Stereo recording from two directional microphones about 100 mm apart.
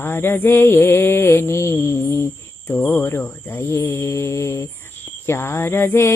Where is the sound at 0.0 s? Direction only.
25° left (ahead or behind).